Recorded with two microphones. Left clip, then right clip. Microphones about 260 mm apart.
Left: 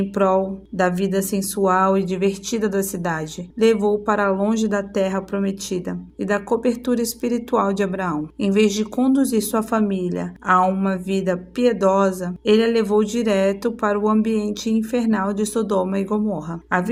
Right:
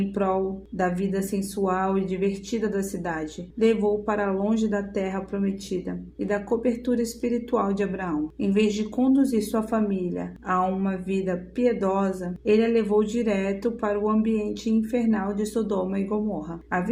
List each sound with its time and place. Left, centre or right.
0.1 s speech: left